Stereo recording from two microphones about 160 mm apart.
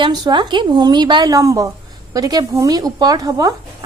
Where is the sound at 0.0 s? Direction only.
30° right (ahead or behind).